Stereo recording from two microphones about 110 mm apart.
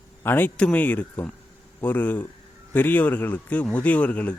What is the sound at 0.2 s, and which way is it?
A man's voice, 20° left (ahead or behind).